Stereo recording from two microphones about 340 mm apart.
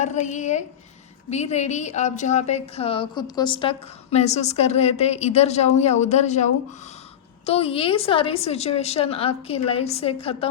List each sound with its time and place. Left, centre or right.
0.0 s a woman's voice: left